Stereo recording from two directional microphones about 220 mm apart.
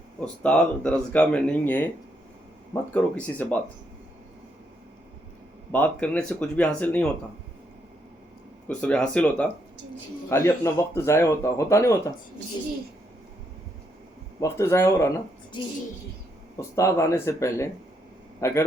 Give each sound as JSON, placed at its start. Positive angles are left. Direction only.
{"t": 0.4, "sound": "speech", "side_deg": 5}
{"t": 5.7, "sound": "speech", "side_deg": 5}
{"t": 8.6, "sound": "speech", "side_deg": 5}
{"t": 14.4, "sound": "speech", "side_deg": 10}
{"t": 15.5, "sound": "a sound", "side_deg": 20}
{"t": 16.6, "sound": "a man's voice", "side_deg": 15}